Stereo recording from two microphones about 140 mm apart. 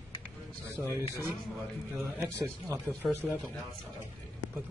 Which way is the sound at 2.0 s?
10° right (ahead or behind).